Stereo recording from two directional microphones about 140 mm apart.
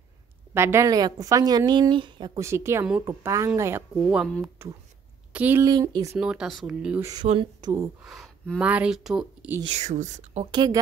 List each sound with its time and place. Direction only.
0.6 s a woman's voice: 20° right (ahead or behind); by 2.3 s 35° right (ahead or behind)
2.3 s a woman's voice: 20° right (ahead or behind)
5.3 s speech: 10° right (ahead or behind)
5.6 s a woman's voice: 30° right (ahead or behind)
6.1 s speech: 5° right (ahead or behind)
7.2 s speech: 50° right (ahead or behind)
7.6 s a woman's voice: 30° right (ahead or behind)
8.0 s speech: centre (ahead or behind)
9.7 s speech: 55° right (ahead or behind)
10.4 s a woman's voice: 30° right (ahead or behind)